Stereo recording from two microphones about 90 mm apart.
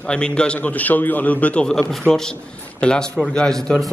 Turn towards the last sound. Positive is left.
turn(degrees=5)  # may be behind; listen again after turning